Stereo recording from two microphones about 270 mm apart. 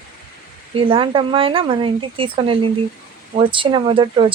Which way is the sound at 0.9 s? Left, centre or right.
Centre.